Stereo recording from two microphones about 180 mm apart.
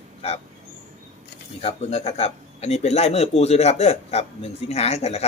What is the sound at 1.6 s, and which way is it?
A man's voice, 35° left (ahead or behind).